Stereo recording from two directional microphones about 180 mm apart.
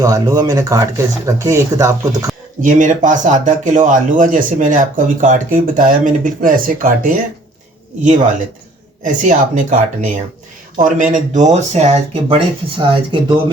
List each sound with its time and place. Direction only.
0.0 s speech: 20° right (ahead or behind)
2.6 s speech: 45° right (ahead or behind)
9.0 s speech: 45° right (ahead or behind); by 13.4 s 25° right (ahead or behind)